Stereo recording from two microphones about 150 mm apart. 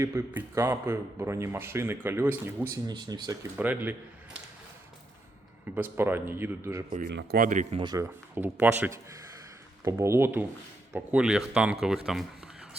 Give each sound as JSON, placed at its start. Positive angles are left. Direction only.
{"t": 0.0, "sound": "speech", "side_deg": -20}
{"t": 3.6, "sound": "speech", "side_deg": -10}
{"t": 5.7, "sound": "speech", "side_deg": -10}
{"t": 6.9, "sound": "speech", "side_deg": -70}
{"t": 7.8, "sound": "speech", "side_deg": -25}